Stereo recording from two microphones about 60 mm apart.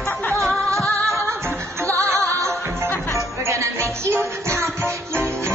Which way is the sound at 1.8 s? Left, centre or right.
Right.